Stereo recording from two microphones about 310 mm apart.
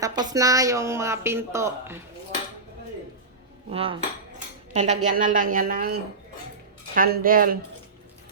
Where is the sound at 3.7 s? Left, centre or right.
Centre.